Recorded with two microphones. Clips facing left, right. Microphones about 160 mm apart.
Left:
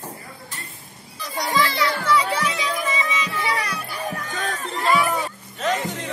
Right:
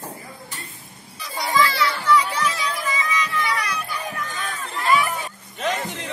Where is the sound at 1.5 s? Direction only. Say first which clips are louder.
Right 1 dB; 20° left (ahead or behind).